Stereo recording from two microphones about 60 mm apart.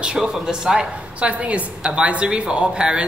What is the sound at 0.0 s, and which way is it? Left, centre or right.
A woman's voice, centre.